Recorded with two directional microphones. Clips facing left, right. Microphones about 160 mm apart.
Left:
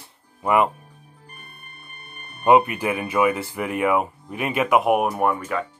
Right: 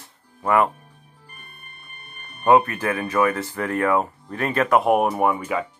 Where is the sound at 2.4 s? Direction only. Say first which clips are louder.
Even; 15° left (ahead or behind).